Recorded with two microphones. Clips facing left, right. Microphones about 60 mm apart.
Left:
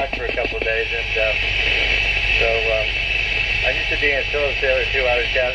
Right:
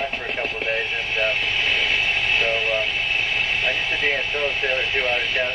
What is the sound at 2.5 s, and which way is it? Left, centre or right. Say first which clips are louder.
Speech: left 3 dB; centre.